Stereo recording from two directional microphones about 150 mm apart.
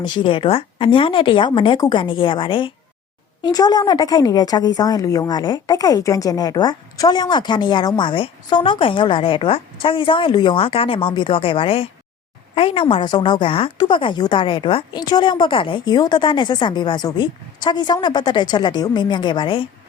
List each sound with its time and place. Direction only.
0.0 s a woman's voice: 30° left (ahead or behind)